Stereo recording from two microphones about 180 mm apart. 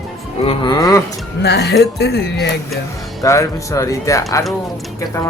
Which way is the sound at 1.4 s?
65° left (ahead or behind).